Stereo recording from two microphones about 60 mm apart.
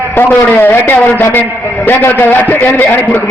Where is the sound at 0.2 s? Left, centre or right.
Left.